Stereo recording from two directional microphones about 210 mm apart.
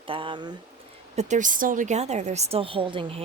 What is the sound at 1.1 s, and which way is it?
A woman's voice, 35° right (ahead or behind).